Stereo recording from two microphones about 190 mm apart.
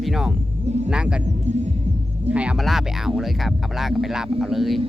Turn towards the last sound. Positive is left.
turn(degrees=0)  # may be behind; listen again after turning